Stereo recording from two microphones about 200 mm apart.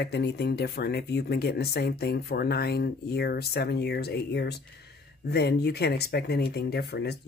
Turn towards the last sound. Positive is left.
turn(degrees=55)  # may be behind; listen again after turning